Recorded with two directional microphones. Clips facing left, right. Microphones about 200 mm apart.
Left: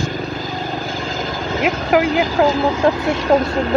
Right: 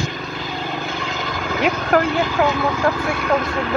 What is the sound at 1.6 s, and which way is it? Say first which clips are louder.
Speech: left 2 dB; 10° left (ahead or behind).